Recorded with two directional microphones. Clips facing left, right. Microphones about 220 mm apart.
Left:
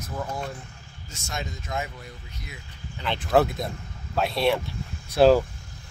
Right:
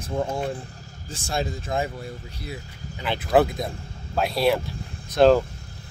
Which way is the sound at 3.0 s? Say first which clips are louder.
Right 2 dB; 5° right (ahead or behind).